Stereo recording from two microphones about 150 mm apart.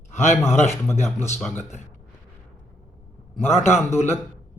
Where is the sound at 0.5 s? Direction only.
50° left (ahead or behind).